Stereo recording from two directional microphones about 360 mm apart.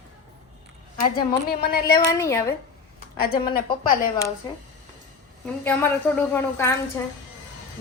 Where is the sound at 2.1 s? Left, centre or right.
Centre.